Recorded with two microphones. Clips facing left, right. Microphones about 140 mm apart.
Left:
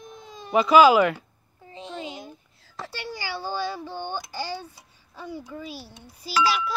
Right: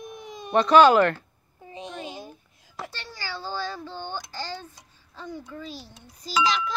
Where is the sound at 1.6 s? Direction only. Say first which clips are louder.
Even; 15° right (ahead or behind).